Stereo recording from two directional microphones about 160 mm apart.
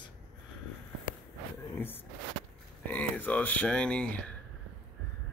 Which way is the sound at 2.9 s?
10° left (ahead or behind).